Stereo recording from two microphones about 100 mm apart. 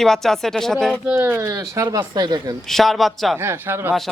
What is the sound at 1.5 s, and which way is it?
Speech, 35° right (ahead or behind).